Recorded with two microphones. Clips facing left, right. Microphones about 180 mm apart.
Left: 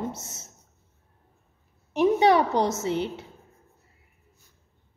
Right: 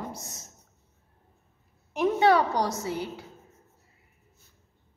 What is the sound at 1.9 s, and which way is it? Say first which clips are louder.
A woman's voice: left 2 dB; 20° left (ahead or behind).